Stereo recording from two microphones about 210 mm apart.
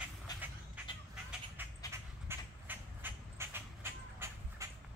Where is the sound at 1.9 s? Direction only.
10° right (ahead or behind).